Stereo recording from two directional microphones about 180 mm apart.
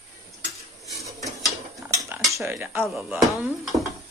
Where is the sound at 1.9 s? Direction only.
15° right (ahead or behind).